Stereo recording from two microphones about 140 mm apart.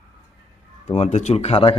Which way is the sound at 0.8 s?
50° left (ahead or behind).